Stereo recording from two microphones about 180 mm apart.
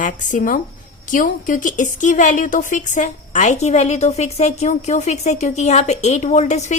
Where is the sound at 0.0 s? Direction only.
45° left (ahead or behind).